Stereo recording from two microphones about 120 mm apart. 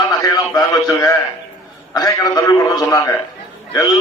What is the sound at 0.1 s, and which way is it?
A man's voice, 30° left (ahead or behind).